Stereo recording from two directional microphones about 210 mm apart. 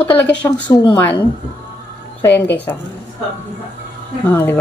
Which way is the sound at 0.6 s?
20° left (ahead or behind).